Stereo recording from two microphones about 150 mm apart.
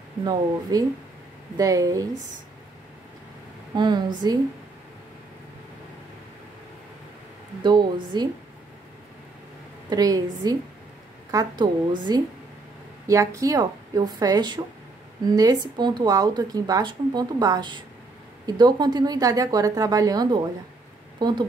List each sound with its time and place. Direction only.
0.2 s speech: 25° right (ahead or behind)
3.7 s speech: 30° right (ahead or behind)
7.6 s a woman's voice: 30° right (ahead or behind)
9.8 s a woman's voice: 25° right (ahead or behind)